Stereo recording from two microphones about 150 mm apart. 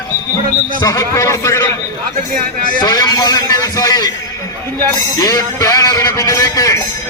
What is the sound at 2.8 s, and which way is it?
A man's voice, 25° left (ahead or behind).